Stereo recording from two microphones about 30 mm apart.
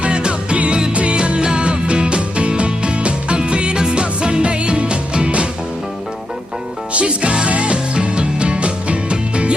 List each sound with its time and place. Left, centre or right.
0.0 s music: right
6.9 s music: right